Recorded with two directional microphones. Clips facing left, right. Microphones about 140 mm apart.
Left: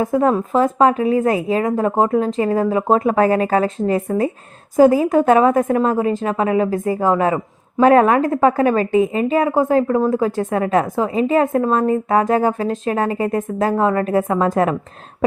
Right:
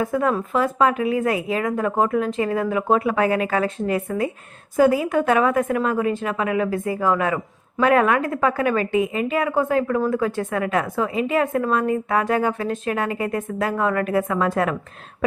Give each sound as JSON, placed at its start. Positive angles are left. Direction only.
{"t": 0.0, "sound": "a woman's voice", "side_deg": 25}